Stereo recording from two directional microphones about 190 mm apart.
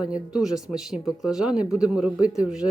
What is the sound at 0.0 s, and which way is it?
Speech, 5° right (ahead or behind).